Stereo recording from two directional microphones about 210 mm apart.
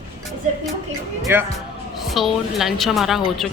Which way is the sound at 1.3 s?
10° right (ahead or behind).